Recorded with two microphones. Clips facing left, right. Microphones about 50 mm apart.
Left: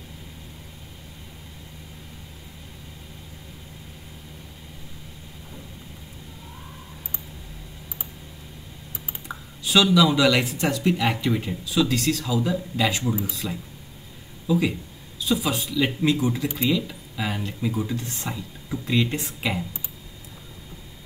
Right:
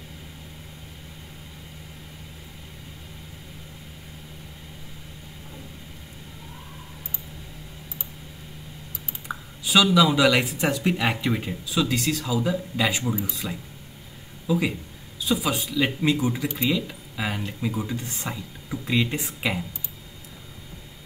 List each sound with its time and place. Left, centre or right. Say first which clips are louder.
9.3 s speech: even; centre
17.9 s speech: left 1 dB; right
18.3 s speech: left 1 dB; centre